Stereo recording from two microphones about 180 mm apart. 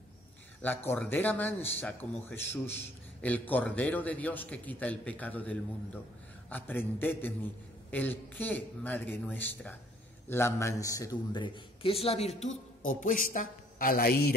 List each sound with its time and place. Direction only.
0.6 s a man's voice: 10° left (ahead or behind); by 14.3 s 55° left (ahead or behind)